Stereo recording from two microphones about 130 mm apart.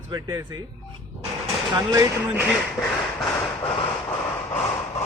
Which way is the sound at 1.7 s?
25° right (ahead or behind).